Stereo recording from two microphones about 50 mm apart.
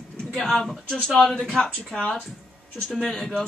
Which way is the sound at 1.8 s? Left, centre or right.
Left.